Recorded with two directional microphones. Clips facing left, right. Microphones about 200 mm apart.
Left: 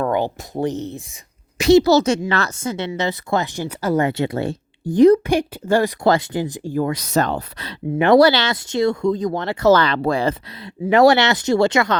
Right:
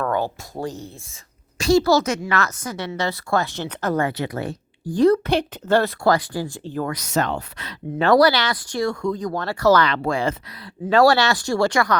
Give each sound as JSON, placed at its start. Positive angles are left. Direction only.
{"t": 0.0, "sound": "speech", "side_deg": 20}
{"t": 3.9, "sound": "speech", "side_deg": 25}
{"t": 6.9, "sound": "speech", "side_deg": 35}
{"t": 7.9, "sound": "speech", "side_deg": 20}
{"t": 10.8, "sound": "speech", "side_deg": 20}